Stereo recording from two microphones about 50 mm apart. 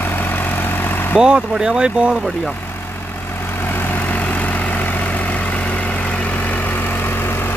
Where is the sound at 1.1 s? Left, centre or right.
Centre.